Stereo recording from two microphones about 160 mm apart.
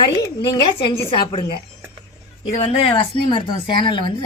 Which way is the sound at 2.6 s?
35° left (ahead or behind).